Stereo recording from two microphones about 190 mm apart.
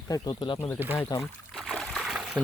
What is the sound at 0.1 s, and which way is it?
Speech, 25° left (ahead or behind).